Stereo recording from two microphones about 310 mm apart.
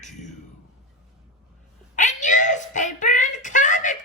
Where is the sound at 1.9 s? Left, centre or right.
Left.